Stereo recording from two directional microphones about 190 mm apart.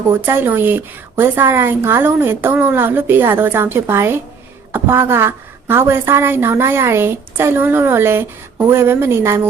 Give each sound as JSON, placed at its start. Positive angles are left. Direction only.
{"t": 0.1, "sound": "a woman's voice", "side_deg": -10}